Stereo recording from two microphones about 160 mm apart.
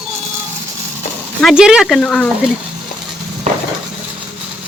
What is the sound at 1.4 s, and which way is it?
Speech, 5° right (ahead or behind).